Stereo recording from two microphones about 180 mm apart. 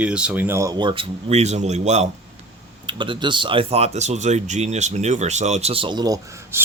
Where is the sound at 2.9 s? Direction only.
25° right (ahead or behind).